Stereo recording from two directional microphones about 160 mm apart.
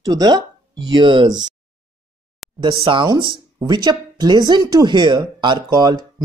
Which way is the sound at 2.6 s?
30° right (ahead or behind).